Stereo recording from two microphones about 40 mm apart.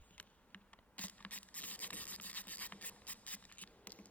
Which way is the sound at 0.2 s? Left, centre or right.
Left.